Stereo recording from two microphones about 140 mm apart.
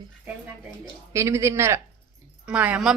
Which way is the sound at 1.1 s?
20° right (ahead or behind).